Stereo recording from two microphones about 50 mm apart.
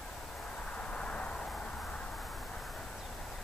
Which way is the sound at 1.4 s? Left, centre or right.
Centre.